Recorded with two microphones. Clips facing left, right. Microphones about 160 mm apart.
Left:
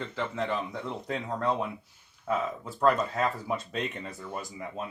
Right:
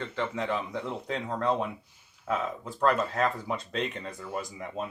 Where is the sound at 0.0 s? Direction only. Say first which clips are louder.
Right 1 dB; centre (ahead or behind).